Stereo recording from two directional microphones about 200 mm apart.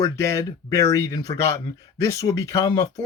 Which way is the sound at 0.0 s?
15° left (ahead or behind).